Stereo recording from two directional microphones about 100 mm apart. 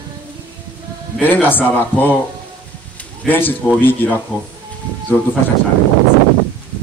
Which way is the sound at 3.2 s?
20° left (ahead or behind).